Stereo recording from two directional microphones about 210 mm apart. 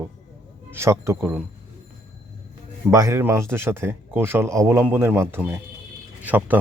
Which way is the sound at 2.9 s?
15° right (ahead or behind).